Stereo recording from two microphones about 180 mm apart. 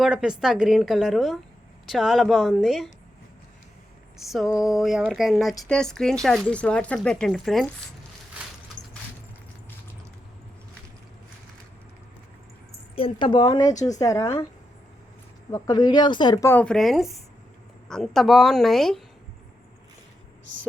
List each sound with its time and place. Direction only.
0.0 s speech: 5° right (ahead or behind)
4.2 s speech: centre (ahead or behind)
13.0 s speech: 30° left (ahead or behind)
15.5 s a woman's voice: 20° left (ahead or behind); by 19.0 s centre (ahead or behind)